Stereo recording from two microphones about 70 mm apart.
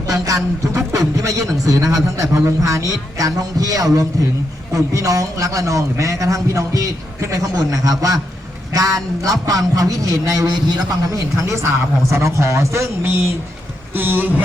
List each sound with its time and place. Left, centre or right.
0.1 s a man's voice: right
11.3 s a man's voice: right
13.9 s speech: right